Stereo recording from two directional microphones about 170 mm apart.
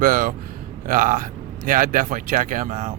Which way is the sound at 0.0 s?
55° right (ahead or behind).